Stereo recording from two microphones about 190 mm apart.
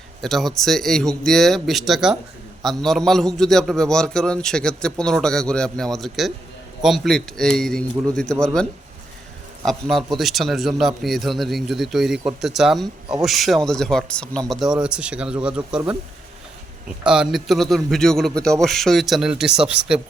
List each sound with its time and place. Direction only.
0.2 s a man's voice: centre (ahead or behind)
9.6 s a man's voice: centre (ahead or behind)
17.1 s a man's voice: 5° right (ahead or behind)